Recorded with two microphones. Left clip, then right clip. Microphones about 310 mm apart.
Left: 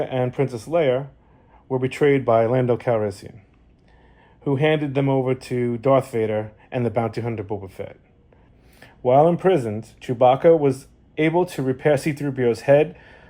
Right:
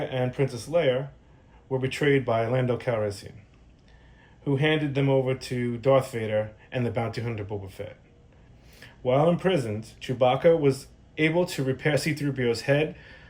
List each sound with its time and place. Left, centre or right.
0.0 s speech: centre
4.4 s speech: centre